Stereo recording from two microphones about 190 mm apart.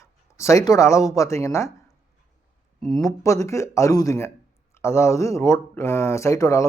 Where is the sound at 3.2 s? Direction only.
15° left (ahead or behind).